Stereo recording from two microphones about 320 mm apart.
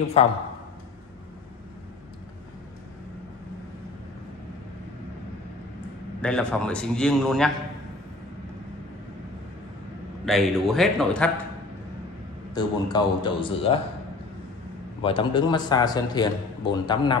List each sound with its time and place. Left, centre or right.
0.2 s speech: centre
6.2 s a man's voice: centre
10.2 s a man's voice: centre
12.5 s a man's voice: centre
15.0 s a man's voice: centre